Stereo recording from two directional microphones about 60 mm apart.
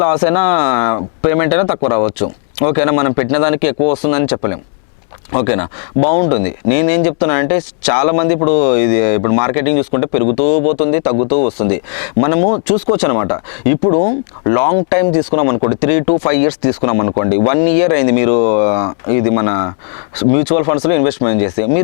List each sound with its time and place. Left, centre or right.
0.0 s speech: left